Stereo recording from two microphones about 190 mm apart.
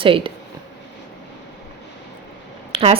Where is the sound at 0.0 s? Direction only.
30° right (ahead or behind).